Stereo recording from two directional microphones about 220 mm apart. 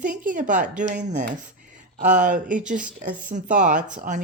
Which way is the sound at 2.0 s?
35° right (ahead or behind).